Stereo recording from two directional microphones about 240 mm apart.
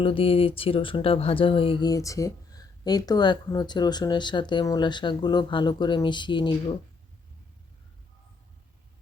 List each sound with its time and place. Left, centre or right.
0.0 s speech: left